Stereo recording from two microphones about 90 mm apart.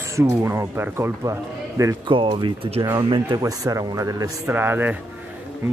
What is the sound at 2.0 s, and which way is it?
Speech, 70° right (ahead or behind).